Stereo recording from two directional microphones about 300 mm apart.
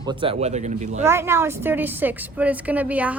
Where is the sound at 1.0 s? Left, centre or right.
Centre.